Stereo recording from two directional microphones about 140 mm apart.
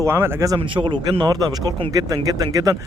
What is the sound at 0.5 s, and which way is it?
Speech, 40° right (ahead or behind).